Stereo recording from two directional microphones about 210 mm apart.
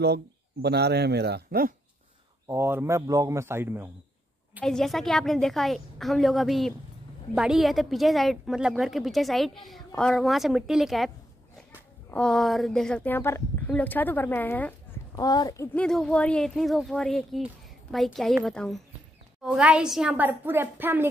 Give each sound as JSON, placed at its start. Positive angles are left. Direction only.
{"t": 0.0, "sound": "speech", "side_deg": -50}
{"t": 2.4, "sound": "a woman's voice", "side_deg": -10}
{"t": 4.6, "sound": "speech", "side_deg": 0}
{"t": 12.1, "sound": "a woman's voice", "side_deg": 5}